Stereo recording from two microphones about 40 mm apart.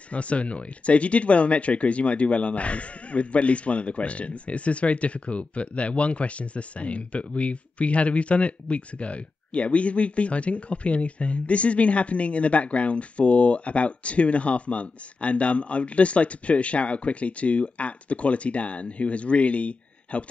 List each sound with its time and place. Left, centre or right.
0.1 s speech: left